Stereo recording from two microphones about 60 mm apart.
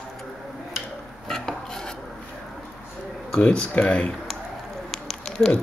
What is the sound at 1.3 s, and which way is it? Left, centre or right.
Filing, centre.